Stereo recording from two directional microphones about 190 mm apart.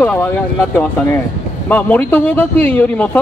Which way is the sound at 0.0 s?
10° left (ahead or behind).